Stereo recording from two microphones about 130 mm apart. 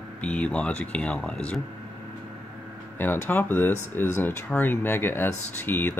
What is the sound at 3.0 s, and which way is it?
Speech, 15° left (ahead or behind).